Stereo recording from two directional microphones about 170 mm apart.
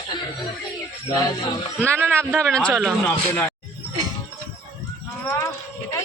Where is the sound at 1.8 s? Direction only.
15° right (ahead or behind).